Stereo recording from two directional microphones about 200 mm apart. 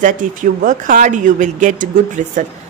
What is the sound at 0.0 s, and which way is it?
A woman's voice, 40° right (ahead or behind).